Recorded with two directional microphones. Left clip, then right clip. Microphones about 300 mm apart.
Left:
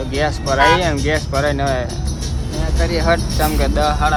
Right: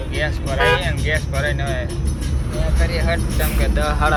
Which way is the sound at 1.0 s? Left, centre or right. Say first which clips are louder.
Left 4 dB; left.